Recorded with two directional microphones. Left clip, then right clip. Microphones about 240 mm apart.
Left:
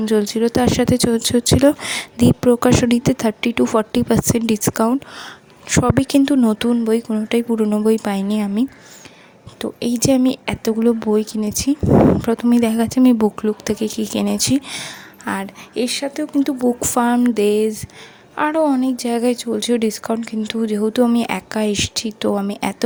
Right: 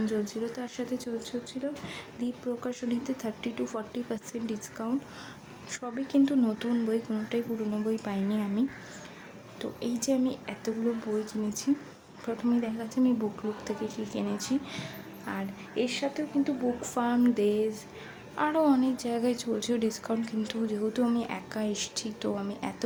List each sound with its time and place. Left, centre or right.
0.0 s speech: left